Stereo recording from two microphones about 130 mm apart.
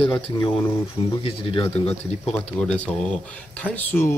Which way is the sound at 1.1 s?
45° left (ahead or behind).